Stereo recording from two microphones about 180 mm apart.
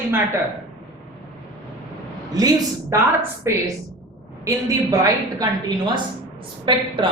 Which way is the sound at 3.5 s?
15° right (ahead or behind).